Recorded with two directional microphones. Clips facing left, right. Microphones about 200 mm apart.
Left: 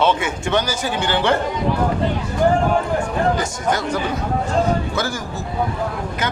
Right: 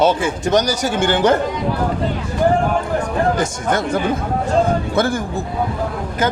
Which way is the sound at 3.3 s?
50° right (ahead or behind).